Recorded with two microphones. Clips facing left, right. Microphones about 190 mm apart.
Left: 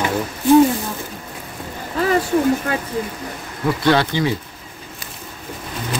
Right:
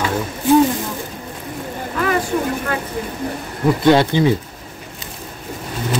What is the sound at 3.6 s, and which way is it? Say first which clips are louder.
Speech: right 4 dB; 20° right (ahead or behind).